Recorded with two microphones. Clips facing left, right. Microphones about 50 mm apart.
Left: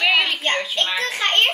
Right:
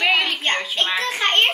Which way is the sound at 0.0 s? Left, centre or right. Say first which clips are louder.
Left 1 dB; centre.